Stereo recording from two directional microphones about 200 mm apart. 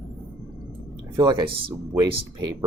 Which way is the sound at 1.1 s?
20° right (ahead or behind).